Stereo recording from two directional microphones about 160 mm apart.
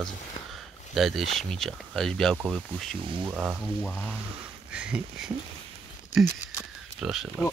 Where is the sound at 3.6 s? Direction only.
10° left (ahead or behind).